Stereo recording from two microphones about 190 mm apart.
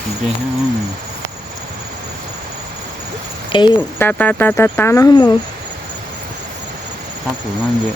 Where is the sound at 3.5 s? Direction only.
25° left (ahead or behind).